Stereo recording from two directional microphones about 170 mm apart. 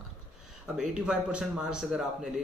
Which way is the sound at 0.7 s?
5° right (ahead or behind).